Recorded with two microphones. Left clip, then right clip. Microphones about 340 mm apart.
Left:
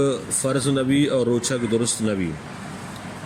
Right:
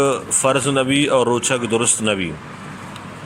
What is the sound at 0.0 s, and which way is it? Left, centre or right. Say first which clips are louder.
Speech: right 6 dB; right.